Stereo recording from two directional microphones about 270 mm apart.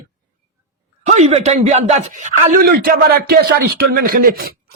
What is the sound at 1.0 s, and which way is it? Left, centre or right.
Speech, right.